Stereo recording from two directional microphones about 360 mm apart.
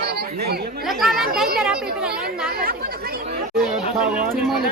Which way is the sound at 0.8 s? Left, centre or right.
Centre.